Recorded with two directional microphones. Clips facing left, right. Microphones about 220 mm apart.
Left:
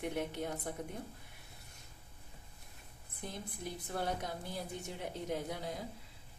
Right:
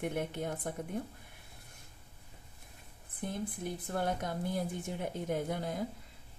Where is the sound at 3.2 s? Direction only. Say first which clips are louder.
Right 6 dB; 55° right (ahead or behind).